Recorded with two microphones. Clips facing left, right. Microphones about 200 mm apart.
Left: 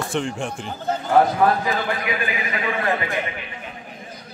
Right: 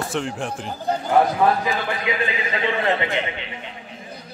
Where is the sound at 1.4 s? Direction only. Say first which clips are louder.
Even; 20° right (ahead or behind).